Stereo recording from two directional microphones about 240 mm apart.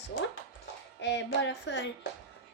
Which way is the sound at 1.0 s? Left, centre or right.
Left.